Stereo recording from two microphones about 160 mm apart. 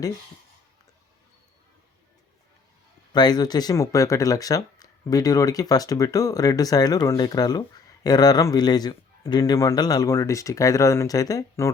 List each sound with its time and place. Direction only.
3.1 s speech: 25° left (ahead or behind)